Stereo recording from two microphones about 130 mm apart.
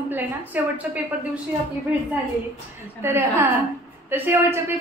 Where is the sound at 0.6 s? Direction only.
15° right (ahead or behind).